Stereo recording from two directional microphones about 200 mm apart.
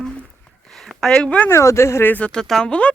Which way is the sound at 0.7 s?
Centre (ahead or behind).